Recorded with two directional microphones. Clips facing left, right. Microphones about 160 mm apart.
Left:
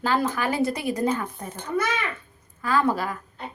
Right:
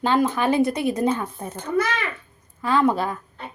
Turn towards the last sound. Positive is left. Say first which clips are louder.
# right 3 dB
turn(degrees=-25)  # may be behind; listen again after turning